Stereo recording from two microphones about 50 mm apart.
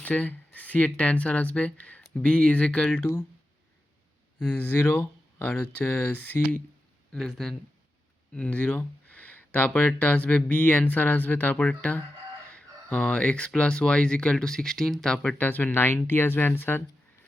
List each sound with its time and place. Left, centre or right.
0.0 s speech: left
4.5 s speech: left
7.1 s speech: centre
8.3 s speech: left
15.4 s speech: left